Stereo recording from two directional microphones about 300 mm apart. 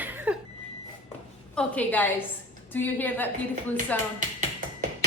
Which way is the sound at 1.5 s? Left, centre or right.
Centre.